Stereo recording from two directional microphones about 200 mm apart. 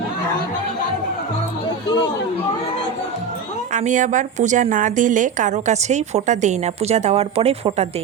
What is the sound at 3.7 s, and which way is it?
A woman's voice, 40° right (ahead or behind).